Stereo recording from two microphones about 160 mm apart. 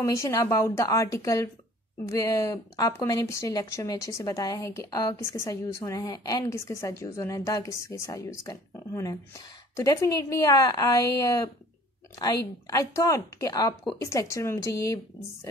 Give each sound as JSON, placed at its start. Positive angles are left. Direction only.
{"t": 0.0, "sound": "a woman's voice", "side_deg": 20}